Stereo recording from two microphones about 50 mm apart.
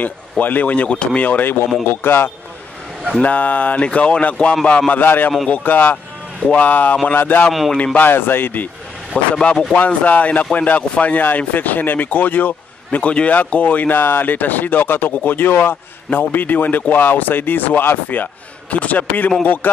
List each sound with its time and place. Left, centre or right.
0.0 s a man's voice: left
1.2 s speech: left
3.2 s a man's voice: left
5.0 s speech: left
8.1 s speech: left
9.4 s speech: centre
9.8 s speech: left